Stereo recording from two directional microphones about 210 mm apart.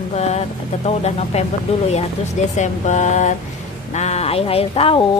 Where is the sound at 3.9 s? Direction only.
30° left (ahead or behind).